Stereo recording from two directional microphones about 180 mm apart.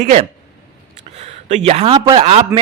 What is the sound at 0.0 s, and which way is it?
A man's voice, 40° right (ahead or behind).